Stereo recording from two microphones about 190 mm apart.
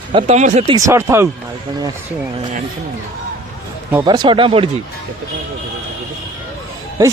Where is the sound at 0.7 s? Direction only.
15° right (ahead or behind).